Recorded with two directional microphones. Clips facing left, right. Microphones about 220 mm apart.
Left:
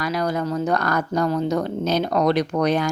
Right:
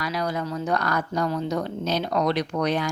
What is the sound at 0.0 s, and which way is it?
A woman's voice, 50° left (ahead or behind).